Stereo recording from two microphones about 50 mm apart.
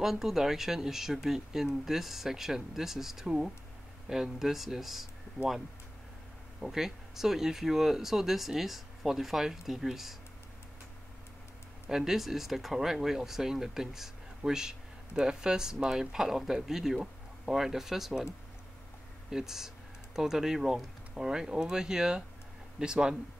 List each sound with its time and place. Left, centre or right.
0.0 s speech: centre
6.6 s speech: centre
11.9 s speech: centre
19.3 s speech: centre